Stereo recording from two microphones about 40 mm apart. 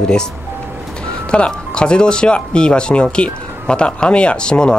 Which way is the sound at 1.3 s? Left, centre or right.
Left.